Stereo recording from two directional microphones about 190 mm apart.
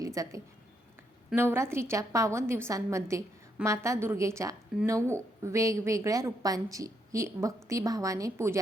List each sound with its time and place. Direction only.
0.0 s a woman's voice: 15° right (ahead or behind)